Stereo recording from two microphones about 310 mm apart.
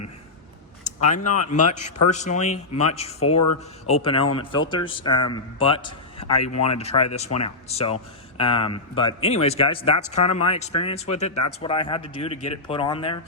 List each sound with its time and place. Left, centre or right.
0.9 s a man's voice: left